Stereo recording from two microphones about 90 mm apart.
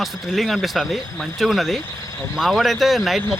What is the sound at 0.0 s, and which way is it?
Speech, centre (ahead or behind).